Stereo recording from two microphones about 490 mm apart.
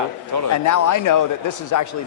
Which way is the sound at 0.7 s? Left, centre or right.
Left.